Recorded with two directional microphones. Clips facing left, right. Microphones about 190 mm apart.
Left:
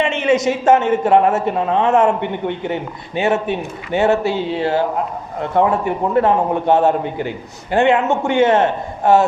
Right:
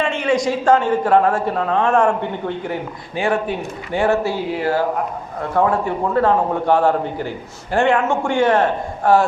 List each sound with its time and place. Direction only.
0.0 s a man's voice: 20° left (ahead or behind)